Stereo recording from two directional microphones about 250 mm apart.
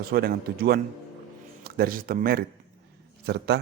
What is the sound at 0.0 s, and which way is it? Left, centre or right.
A man's voice, right.